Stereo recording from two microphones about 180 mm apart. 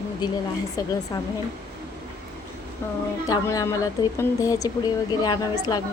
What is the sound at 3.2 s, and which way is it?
A woman's voice, 20° left (ahead or behind).